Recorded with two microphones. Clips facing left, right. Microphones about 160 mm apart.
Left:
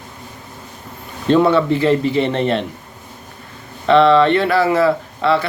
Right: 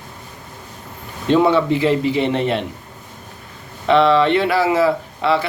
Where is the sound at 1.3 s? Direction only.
15° right (ahead or behind).